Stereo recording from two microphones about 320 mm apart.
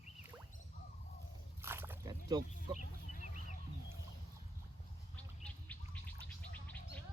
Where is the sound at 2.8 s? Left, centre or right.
Left.